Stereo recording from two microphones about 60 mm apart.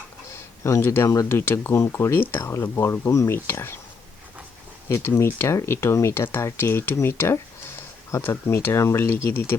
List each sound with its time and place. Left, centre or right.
0.9 s speech: left
1.3 s speech: left
4.9 s speech: left